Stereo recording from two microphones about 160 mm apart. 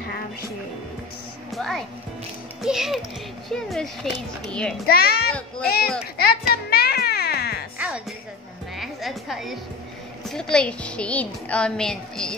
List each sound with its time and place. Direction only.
1.5 s music: centre (ahead or behind)
2.6 s a woman's voice: centre (ahead or behind)
4.8 s a child's voice: 70° left (ahead or behind)
8.7 s music: centre (ahead or behind)
10.2 s a woman's voice: 5° left (ahead or behind)